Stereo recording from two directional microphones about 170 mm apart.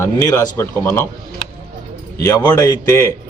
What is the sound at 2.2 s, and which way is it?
Speech, 20° left (ahead or behind).